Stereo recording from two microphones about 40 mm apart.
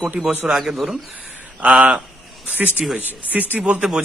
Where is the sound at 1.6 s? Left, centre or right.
Right.